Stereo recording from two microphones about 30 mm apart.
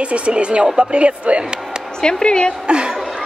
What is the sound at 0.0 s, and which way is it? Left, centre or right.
Speech, right.